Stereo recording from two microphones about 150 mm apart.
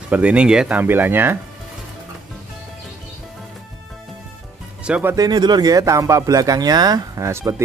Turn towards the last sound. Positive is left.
turn(degrees=-20)  # may be behind; listen again after turning